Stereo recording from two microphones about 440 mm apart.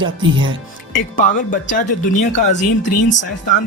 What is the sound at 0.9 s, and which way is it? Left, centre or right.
Speech, centre.